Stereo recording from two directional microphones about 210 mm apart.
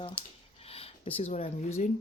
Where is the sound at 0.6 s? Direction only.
30° left (ahead or behind).